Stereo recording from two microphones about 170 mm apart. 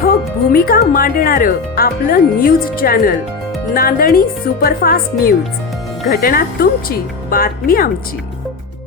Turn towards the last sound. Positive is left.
turn(degrees=60)  # may be behind; listen again after turning